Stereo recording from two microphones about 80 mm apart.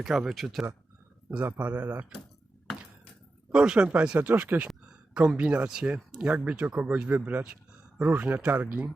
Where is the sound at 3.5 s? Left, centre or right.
Centre.